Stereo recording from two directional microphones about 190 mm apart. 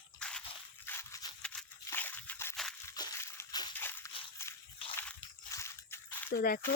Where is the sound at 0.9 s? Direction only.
15° left (ahead or behind).